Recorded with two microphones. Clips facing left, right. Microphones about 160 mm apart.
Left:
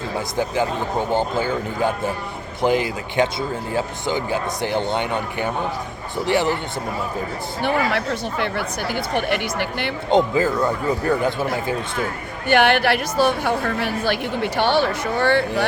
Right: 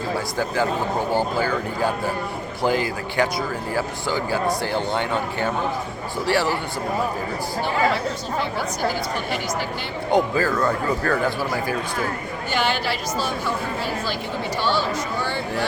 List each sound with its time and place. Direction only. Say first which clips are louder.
0.3 s speech: left 2 dB; 20° left (ahead or behind)
7.6 s a woman's voice: left 1 dB; 65° left (ahead or behind)
10.1 s speech: left 2 dB; 20° left (ahead or behind)
12.5 s a woman's voice: left 8 dB; 65° left (ahead or behind)